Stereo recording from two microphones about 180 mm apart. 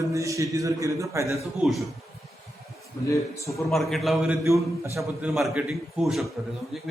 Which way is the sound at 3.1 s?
15° left (ahead or behind).